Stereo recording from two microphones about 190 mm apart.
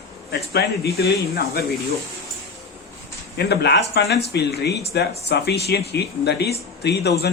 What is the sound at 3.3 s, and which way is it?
Speech, 60° left (ahead or behind).